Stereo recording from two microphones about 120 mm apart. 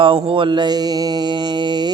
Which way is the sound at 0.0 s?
45° right (ahead or behind).